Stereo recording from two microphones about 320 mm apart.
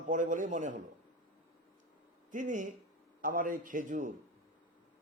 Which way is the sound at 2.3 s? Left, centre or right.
Right.